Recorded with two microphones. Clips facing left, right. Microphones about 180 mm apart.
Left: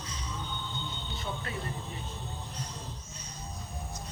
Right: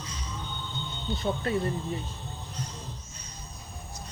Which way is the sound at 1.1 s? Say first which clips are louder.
Right 11 dB; 35° right (ahead or behind).